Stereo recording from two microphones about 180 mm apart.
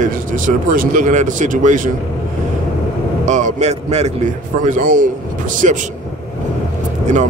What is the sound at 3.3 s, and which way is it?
Speech, 40° right (ahead or behind).